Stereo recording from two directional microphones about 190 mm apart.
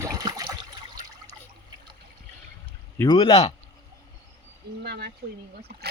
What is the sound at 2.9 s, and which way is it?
Speech, 25° left (ahead or behind).